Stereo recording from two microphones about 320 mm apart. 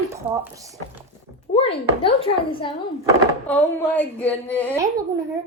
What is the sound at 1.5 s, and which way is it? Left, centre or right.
Speech, centre.